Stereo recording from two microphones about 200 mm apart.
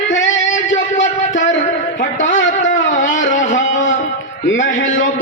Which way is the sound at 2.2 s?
70° left (ahead or behind).